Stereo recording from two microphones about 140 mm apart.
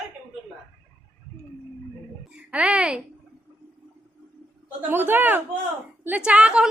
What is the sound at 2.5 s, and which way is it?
Speech, 10° right (ahead or behind).